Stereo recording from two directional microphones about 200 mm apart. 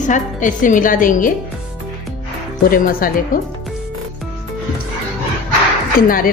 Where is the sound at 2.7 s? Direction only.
45° left (ahead or behind).